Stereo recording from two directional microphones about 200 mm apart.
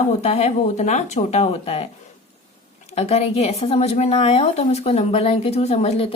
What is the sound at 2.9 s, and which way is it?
A woman's voice, 30° left (ahead or behind).